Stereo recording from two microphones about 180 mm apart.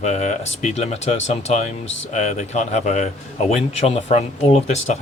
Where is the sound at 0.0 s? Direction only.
40° left (ahead or behind).